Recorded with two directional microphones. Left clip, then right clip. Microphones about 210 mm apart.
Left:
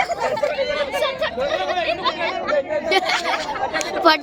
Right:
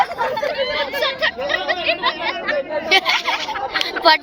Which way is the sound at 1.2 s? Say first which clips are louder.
Right 2 dB; 50° left (ahead or behind).